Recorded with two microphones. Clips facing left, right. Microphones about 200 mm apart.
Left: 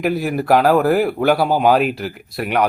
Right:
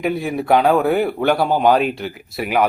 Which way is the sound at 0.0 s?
Centre (ahead or behind).